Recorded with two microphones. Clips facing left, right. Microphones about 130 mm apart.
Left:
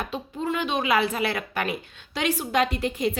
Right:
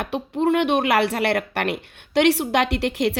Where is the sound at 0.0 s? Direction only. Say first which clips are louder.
Right 8 dB; 70° right (ahead or behind).